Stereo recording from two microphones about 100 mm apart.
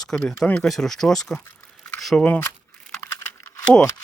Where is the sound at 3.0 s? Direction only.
30° left (ahead or behind).